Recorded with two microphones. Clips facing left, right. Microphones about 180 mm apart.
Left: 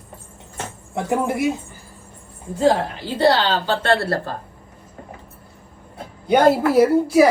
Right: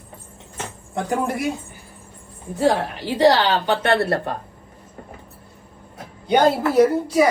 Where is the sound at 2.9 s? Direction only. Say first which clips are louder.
Right 1 dB; 15° right (ahead or behind).